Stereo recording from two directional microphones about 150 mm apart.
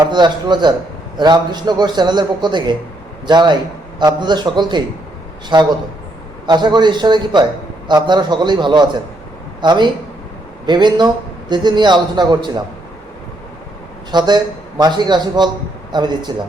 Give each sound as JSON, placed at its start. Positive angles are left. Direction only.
{"t": 0.0, "sound": "a man's voice", "side_deg": -30}
{"t": 14.1, "sound": "a man's voice", "side_deg": -30}